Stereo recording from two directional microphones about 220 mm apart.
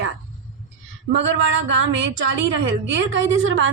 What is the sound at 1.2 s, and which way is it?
A woman's voice, 60° right (ahead or behind).